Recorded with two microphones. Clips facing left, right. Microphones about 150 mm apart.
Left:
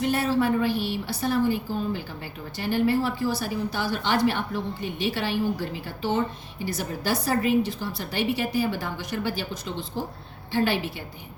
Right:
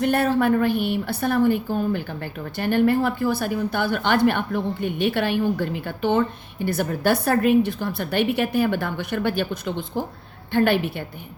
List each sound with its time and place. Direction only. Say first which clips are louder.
0.0 s a woman's voice: right 4 dB; 55° right (ahead or behind)